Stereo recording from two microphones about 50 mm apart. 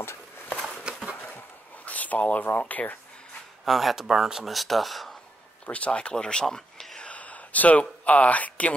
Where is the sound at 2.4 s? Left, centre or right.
Left.